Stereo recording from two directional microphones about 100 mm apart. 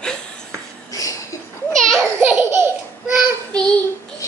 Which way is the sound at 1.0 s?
35° left (ahead or behind).